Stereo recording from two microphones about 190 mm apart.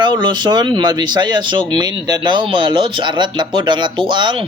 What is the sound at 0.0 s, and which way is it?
Speech, 25° right (ahead or behind).